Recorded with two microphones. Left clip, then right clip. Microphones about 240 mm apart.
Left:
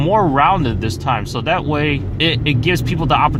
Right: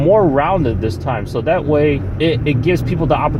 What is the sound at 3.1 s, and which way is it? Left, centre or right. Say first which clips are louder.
Speech: left 2 dB; left.